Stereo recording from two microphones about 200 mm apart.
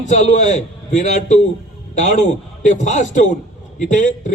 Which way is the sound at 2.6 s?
40° left (ahead or behind).